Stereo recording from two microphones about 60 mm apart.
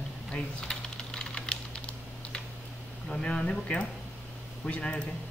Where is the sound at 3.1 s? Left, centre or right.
Centre.